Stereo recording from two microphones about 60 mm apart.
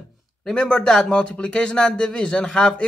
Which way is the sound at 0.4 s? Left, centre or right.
Centre.